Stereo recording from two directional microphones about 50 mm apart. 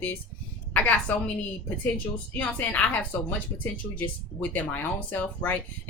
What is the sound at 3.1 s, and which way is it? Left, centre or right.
Speech, left.